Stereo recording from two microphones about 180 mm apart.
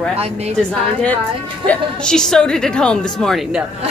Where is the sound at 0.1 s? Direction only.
35° right (ahead or behind).